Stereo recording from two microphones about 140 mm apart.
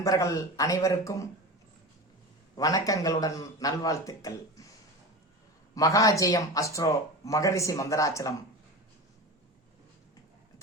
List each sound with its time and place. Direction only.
0.0 s a man's voice: 25° left (ahead or behind)
2.6 s a man's voice: 25° left (ahead or behind)
5.7 s a man's voice: 25° left (ahead or behind)